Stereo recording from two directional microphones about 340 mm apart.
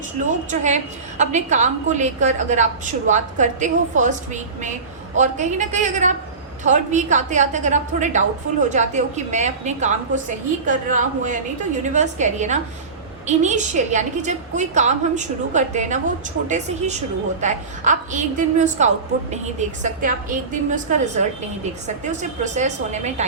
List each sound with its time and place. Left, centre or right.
0.3 s a woman's voice: right